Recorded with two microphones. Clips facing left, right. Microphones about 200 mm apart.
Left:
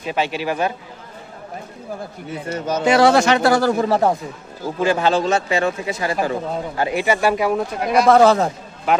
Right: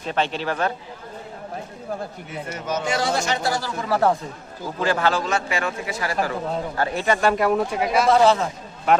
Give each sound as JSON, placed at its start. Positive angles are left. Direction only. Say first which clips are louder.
{"t": 0.0, "sound": "speech", "louder": "left 2 dB", "side_deg": 10}
{"t": 2.5, "sound": "speech", "louder": "left 5 dB", "side_deg": 30}
{"t": 2.8, "sound": "speech", "louder": "left 12 dB", "side_deg": 65}
{"t": 3.8, "sound": "a man's voice", "louder": "left 3 dB", "side_deg": 25}
{"t": 8.0, "sound": "a man's voice", "louder": "left 5 dB", "side_deg": 50}